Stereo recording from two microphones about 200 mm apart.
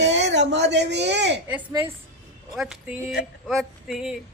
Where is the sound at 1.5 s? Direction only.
10° right (ahead or behind).